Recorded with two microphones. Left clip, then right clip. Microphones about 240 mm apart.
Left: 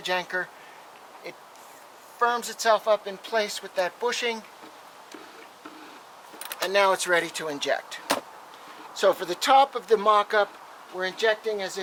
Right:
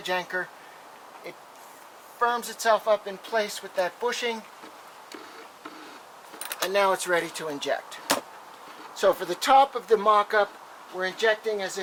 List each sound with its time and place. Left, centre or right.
0.0 s speech: centre
2.2 s speech: centre
6.6 s speech: centre